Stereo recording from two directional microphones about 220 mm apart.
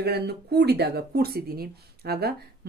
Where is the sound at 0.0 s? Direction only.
45° right (ahead or behind).